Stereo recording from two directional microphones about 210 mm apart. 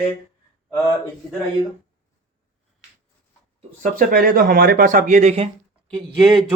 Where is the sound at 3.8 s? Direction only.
40° right (ahead or behind).